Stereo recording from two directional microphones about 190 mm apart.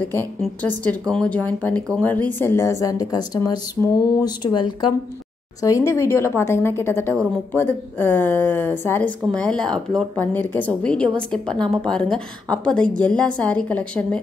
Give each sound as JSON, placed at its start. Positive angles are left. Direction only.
{"t": 0.1, "sound": "speech", "side_deg": 10}
{"t": 5.9, "sound": "a woman's voice", "side_deg": 15}